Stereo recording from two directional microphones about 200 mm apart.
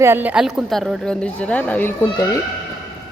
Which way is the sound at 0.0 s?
10° right (ahead or behind).